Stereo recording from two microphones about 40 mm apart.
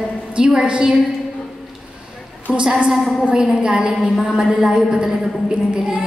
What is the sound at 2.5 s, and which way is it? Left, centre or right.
A woman's voice, right.